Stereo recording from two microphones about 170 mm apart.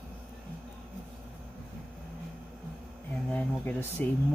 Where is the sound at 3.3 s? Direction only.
10° left (ahead or behind).